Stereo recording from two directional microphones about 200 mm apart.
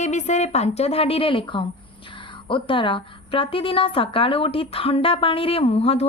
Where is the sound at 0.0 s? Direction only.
35° left (ahead or behind).